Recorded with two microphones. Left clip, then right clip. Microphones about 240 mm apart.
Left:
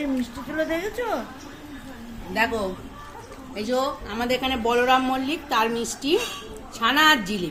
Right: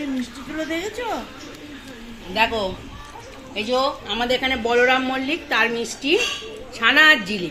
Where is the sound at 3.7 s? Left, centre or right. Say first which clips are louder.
Right 4 dB; centre.